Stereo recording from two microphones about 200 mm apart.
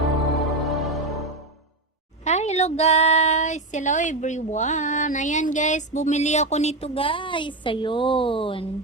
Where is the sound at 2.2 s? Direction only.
35° left (ahead or behind).